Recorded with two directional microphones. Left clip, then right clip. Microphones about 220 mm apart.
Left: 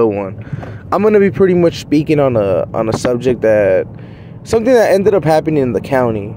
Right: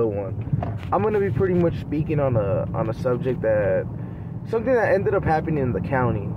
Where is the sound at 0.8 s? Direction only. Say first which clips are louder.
Left 11 dB; 55° left (ahead or behind).